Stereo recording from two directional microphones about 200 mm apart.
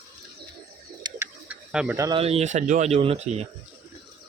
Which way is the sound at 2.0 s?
20° right (ahead or behind).